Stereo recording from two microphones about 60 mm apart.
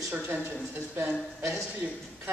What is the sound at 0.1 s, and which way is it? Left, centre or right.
Speech, right.